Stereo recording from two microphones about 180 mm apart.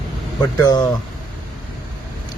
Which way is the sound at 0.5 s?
20° left (ahead or behind).